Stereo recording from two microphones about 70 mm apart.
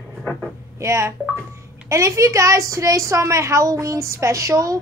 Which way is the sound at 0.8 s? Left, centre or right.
Right.